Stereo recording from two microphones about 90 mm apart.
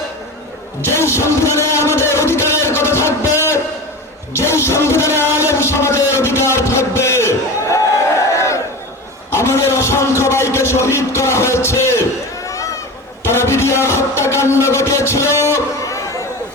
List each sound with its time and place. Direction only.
0.9 s speech: 30° left (ahead or behind)
4.4 s music: 30° left (ahead or behind)
9.3 s a man's voice: 30° left (ahead or behind)
13.2 s a sound: 30° left (ahead or behind)